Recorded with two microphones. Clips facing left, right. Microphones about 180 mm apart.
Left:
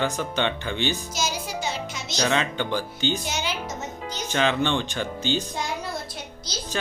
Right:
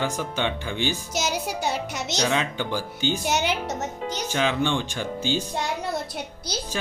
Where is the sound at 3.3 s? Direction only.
65° right (ahead or behind).